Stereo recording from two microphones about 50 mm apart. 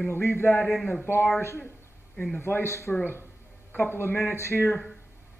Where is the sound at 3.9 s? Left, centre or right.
Left.